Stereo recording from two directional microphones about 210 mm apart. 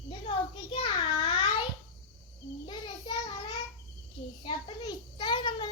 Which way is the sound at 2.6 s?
20° left (ahead or behind).